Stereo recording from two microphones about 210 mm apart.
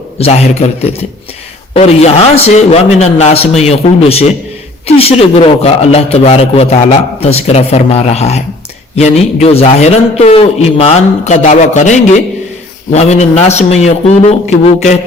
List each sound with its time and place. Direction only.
0.2 s a man's voice: 30° left (ahead or behind)